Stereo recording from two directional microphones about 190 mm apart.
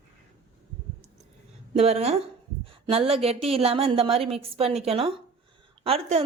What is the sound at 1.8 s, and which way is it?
A woman's voice, 35° right (ahead or behind).